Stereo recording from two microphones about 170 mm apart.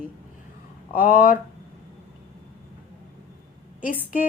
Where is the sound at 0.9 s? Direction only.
55° left (ahead or behind).